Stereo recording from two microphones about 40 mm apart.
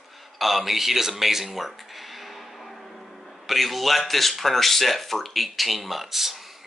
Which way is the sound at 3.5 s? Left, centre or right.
Centre.